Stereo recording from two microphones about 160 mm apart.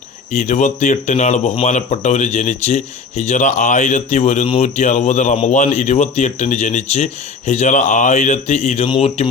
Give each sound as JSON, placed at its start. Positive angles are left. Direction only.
{"t": 0.3, "sound": "speech", "side_deg": 50}